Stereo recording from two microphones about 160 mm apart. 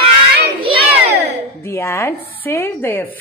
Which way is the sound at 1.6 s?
15° left (ahead or behind).